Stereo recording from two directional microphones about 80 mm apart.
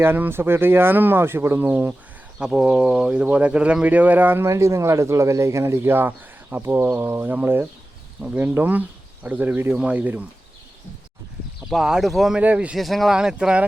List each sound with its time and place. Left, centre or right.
0.0 s speech: right
2.4 s speech: centre
4.4 s speech: right; by 10.2 s centre
11.6 s speech: centre
12.4 s speech: centre
12.7 s speech: centre